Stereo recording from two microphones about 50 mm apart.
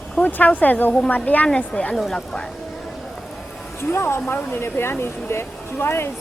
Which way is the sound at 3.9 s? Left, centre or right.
Left.